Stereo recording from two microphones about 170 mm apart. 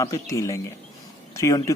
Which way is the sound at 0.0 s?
20° left (ahead or behind).